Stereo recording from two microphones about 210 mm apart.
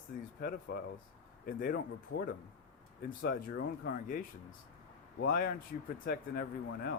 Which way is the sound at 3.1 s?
45° left (ahead or behind).